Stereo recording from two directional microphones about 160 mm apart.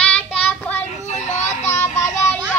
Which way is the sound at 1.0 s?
45° left (ahead or behind).